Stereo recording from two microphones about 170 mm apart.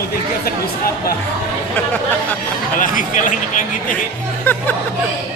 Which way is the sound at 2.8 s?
50° left (ahead or behind).